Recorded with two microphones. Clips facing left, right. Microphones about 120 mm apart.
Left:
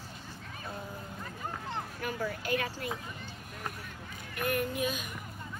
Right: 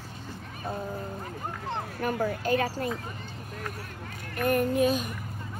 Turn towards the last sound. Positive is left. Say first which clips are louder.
# right 8 dB
turn(degrees=-40)  # may be behind; listen again after turning